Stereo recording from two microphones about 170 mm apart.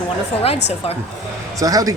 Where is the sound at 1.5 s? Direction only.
20° right (ahead or behind).